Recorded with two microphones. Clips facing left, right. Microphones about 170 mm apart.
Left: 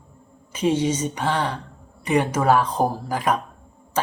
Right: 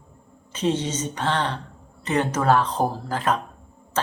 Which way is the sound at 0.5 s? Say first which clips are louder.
Left 3 dB; 10° left (ahead or behind).